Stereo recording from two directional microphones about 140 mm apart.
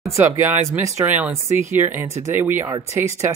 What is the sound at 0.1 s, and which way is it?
Speech, 15° right (ahead or behind).